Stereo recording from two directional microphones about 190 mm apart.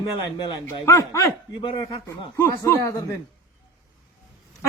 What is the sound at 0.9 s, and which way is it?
A man's voice, 15° left (ahead or behind).